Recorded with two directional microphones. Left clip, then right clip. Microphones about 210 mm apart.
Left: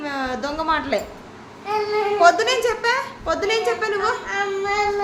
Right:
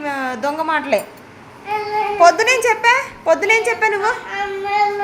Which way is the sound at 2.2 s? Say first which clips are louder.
Right 5 dB; 15° right (ahead or behind).